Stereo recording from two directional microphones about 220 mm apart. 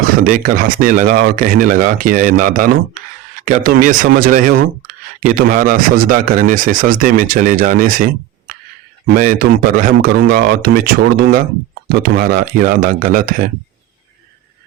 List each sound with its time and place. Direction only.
0.0 s speech: 40° right (ahead or behind)